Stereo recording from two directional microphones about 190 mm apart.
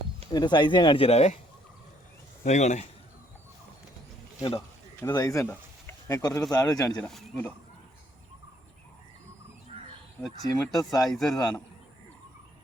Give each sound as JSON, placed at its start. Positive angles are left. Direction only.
{"t": 0.3, "sound": "speech", "side_deg": 20}
{"t": 2.4, "sound": "a man's voice", "side_deg": 40}
{"t": 4.9, "sound": "speech", "side_deg": 20}
{"t": 6.9, "sound": "speech", "side_deg": 5}
{"t": 9.7, "sound": "crow", "side_deg": -30}
{"t": 10.2, "sound": "speech", "side_deg": 0}